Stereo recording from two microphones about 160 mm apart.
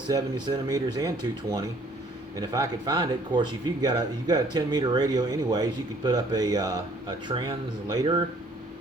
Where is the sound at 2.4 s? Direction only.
25° right (ahead or behind).